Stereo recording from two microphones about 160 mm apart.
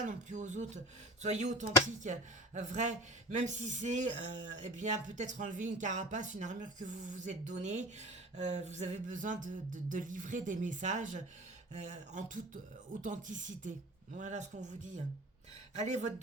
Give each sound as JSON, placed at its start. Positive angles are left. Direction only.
{"t": 0.0, "sound": "speech", "side_deg": -50}